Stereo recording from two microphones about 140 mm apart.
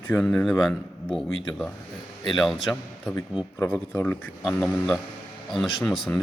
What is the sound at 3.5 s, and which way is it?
Speech, 20° left (ahead or behind).